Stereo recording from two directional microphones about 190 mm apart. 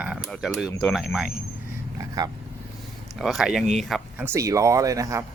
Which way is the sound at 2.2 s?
20° right (ahead or behind).